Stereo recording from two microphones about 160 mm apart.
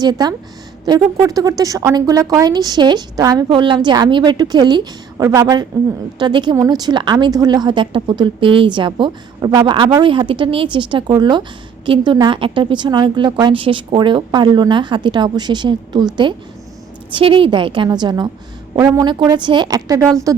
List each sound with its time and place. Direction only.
0.0 s a woman's voice: 25° right (ahead or behind)
17.1 s a woman's voice: 30° right (ahead or behind)